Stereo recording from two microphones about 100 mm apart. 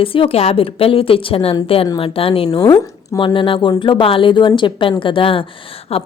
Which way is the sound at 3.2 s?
55° left (ahead or behind).